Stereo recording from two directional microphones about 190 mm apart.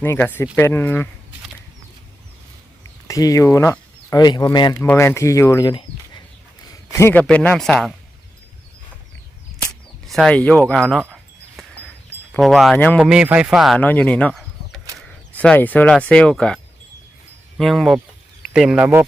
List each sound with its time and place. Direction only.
0.0 s speech: 10° left (ahead or behind)
3.1 s speech: 20° left (ahead or behind)
6.9 s speech: 10° left (ahead or behind)
10.1 s speech: centre (ahead or behind)
11.0 s wind chime: 5° right (ahead or behind)
12.4 s speech: centre (ahead or behind)
13.0 s speech: 5° right (ahead or behind)
17.6 s speech: centre (ahead or behind)